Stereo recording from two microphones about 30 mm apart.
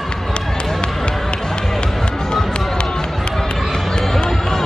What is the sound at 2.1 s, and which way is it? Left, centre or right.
Run, left.